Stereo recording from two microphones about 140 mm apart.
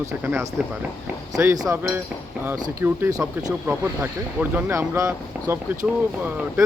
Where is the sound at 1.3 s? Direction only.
25° right (ahead or behind).